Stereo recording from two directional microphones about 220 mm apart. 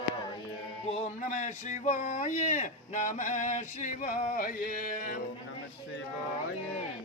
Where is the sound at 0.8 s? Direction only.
30° left (ahead or behind).